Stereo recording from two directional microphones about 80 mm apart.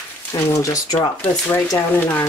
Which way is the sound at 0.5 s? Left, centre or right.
Left.